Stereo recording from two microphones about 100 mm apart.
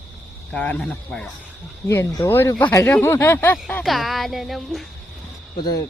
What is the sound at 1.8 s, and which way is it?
Speech, 30° left (ahead or behind).